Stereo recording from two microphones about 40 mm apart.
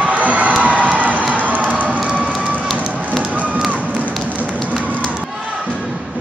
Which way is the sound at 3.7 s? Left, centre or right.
Right.